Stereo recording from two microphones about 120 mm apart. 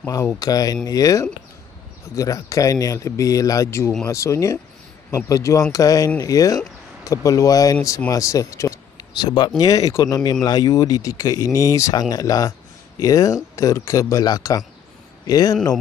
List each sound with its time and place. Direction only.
0.0 s speech: 25° left (ahead or behind)